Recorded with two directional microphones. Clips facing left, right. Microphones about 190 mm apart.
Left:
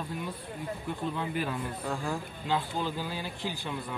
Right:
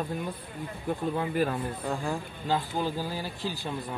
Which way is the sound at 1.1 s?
45° right (ahead or behind).